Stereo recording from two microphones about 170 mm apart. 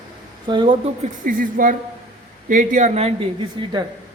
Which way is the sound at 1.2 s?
55° right (ahead or behind).